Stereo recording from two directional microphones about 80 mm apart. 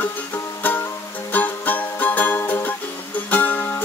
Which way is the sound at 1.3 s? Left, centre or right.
Left.